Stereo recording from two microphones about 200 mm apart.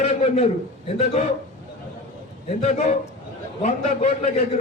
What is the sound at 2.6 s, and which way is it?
Speech, 35° left (ahead or behind).